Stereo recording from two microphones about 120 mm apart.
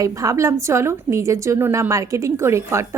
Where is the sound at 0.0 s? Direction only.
30° right (ahead or behind).